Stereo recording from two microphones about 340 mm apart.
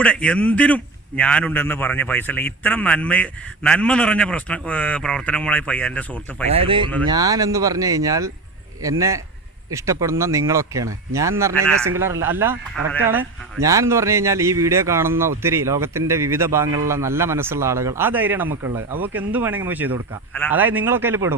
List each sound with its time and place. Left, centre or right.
0.0 s a man's voice: centre
6.5 s a man's voice: centre